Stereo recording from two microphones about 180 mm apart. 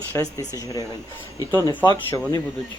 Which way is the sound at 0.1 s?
20° left (ahead or behind).